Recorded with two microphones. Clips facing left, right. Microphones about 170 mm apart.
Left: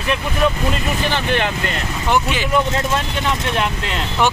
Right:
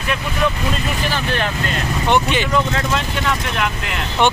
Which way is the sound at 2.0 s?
5° left (ahead or behind).